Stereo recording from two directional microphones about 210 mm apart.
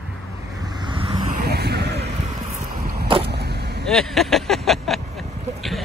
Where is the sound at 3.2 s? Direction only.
50° right (ahead or behind).